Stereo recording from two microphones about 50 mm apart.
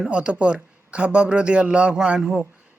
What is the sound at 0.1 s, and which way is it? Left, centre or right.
A man's voice, right.